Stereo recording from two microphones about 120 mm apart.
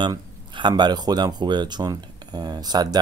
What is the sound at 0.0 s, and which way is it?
Speech, 40° right (ahead or behind).